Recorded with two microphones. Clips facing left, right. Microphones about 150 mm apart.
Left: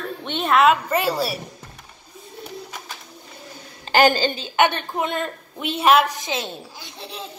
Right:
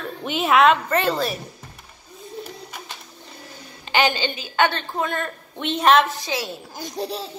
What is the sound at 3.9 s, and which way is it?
Speech, 45° left (ahead or behind).